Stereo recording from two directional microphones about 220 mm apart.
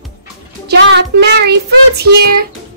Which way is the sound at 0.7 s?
50° right (ahead or behind).